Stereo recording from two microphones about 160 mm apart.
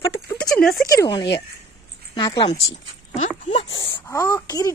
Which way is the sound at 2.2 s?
30° left (ahead or behind).